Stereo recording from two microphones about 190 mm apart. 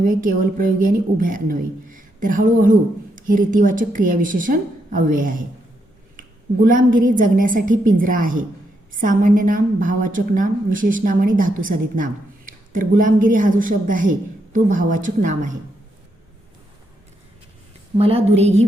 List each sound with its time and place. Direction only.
0.0 s a woman's voice: 45° right (ahead or behind)
17.9 s a woman's voice: 30° right (ahead or behind)